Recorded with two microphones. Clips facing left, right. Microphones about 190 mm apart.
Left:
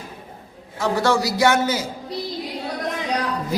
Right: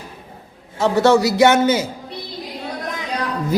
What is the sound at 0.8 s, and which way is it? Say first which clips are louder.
A man's voice: right 6 dB; 25° right (ahead or behind).